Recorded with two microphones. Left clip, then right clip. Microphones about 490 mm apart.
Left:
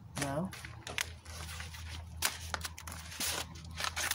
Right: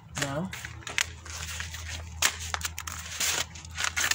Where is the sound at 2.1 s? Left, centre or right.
Left.